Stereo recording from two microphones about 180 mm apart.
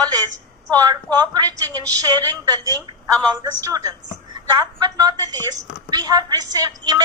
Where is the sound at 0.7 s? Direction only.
20° right (ahead or behind).